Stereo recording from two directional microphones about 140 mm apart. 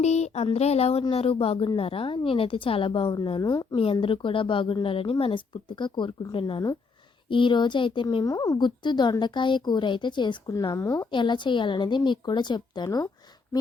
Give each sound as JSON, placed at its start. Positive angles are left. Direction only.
{"t": 0.0, "sound": "a woman's voice", "side_deg": 50}
{"t": 3.9, "sound": "a woman's voice", "side_deg": 40}